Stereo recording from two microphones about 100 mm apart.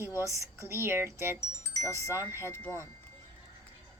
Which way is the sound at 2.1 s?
25° right (ahead or behind).